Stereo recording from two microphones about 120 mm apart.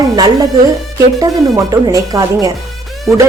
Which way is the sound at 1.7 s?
30° right (ahead or behind).